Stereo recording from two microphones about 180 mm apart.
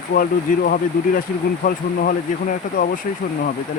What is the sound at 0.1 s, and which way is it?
Speech, 55° left (ahead or behind).